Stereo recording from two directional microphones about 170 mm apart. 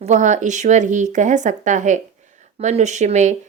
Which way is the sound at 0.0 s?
45° right (ahead or behind).